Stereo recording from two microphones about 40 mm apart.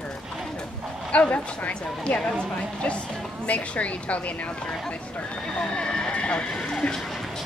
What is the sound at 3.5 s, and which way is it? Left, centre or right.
Speech, left.